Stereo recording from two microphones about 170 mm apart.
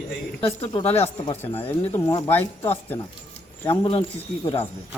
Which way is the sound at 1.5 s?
15° left (ahead or behind).